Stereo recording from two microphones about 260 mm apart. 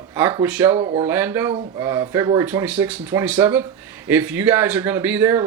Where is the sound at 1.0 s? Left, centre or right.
Centre.